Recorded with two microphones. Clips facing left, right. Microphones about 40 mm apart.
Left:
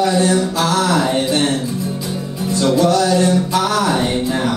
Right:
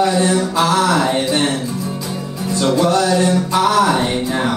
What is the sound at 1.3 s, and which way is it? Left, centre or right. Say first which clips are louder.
Music: even; right.